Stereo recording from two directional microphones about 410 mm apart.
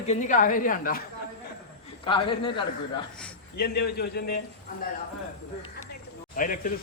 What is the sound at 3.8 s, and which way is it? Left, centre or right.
Speech, left.